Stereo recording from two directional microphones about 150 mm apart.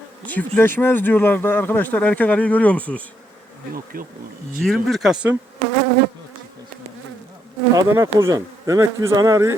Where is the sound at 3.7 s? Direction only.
70° right (ahead or behind).